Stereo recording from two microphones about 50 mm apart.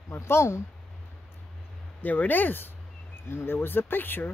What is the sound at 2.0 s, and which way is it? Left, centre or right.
Speech, left.